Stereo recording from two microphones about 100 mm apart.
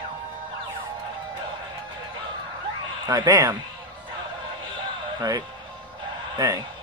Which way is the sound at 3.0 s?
40° right (ahead or behind).